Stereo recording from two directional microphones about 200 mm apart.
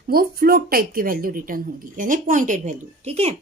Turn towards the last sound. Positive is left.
turn(degrees=-30)  # may be behind; listen again after turning